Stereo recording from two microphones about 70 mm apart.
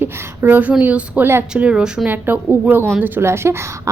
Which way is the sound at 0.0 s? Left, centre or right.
Right.